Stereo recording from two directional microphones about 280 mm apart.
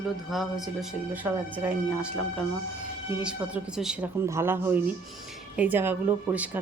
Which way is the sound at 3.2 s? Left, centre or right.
Centre.